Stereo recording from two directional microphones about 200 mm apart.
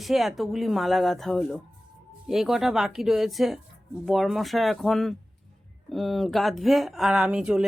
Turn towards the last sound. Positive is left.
turn(degrees=-5)  # may be behind; listen again after turning